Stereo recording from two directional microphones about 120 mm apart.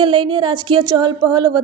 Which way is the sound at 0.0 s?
40° right (ahead or behind).